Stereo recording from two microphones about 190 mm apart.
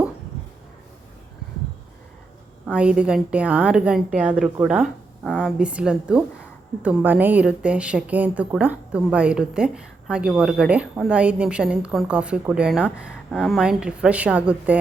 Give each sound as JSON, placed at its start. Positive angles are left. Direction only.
{"t": 2.6, "sound": "a woman's voice", "side_deg": -5}
{"t": 5.5, "sound": "a woman's voice", "side_deg": -5}